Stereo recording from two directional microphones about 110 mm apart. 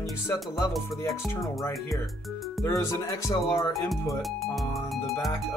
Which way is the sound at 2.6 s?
25° left (ahead or behind).